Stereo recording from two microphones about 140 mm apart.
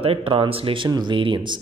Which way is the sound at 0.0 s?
45° right (ahead or behind).